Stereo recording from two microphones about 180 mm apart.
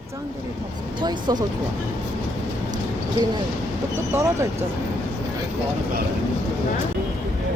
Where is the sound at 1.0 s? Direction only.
25° right (ahead or behind).